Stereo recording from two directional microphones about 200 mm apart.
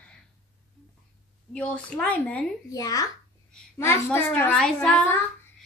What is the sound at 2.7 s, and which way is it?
A woman's voice, 20° left (ahead or behind).